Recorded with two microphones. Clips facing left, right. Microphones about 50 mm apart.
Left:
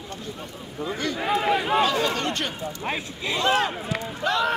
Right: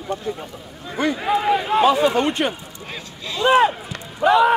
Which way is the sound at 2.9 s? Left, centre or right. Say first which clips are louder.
Left 2 dB; left.